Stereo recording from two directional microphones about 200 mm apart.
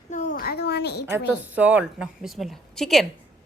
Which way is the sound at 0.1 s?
40° left (ahead or behind).